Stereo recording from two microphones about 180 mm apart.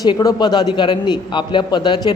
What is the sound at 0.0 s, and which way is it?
A man's voice, 20° left (ahead or behind).